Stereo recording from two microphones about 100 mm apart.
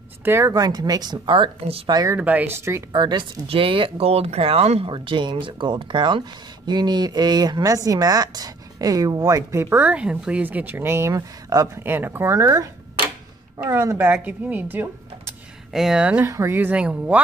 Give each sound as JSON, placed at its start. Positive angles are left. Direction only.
{"t": 0.2, "sound": "speech", "side_deg": -25}
{"t": 0.5, "sound": "speech", "side_deg": -40}
{"t": 2.1, "sound": "a woman's voice", "side_deg": -20}
{"t": 2.9, "sound": "speech", "side_deg": -50}
{"t": 4.9, "sound": "speech", "side_deg": -55}
{"t": 9.8, "sound": "a woman's voice", "side_deg": -10}
{"t": 11.8, "sound": "a woman's voice", "side_deg": -20}
{"t": 13.7, "sound": "a woman's voice", "side_deg": -25}
{"t": 15.7, "sound": "speech", "side_deg": -5}
{"t": 16.3, "sound": "a woman's voice", "side_deg": -25}